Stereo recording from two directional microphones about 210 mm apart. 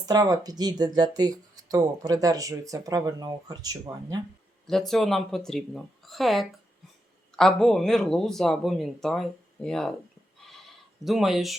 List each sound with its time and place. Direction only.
0.0 s speech: 15° right (ahead or behind)
4.9 s speech: centre (ahead or behind)
11.0 s speech: centre (ahead or behind)